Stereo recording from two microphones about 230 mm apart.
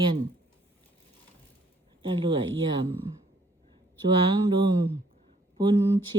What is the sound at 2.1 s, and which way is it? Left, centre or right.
Mantra, right.